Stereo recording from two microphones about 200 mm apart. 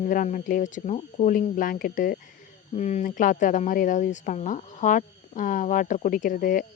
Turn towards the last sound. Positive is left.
turn(degrees=45)  # may be behind; listen again after turning